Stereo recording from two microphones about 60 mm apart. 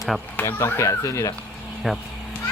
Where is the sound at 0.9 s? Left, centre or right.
Left.